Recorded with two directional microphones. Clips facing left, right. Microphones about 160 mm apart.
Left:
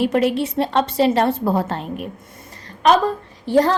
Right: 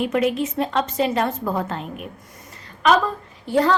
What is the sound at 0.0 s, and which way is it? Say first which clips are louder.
A woman's voice: left 3 dB; 35° left (ahead or behind).